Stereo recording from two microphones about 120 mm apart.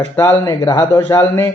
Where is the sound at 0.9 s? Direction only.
20° left (ahead or behind).